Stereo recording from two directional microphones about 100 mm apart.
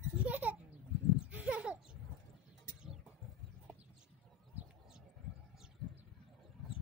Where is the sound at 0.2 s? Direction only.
15° right (ahead or behind).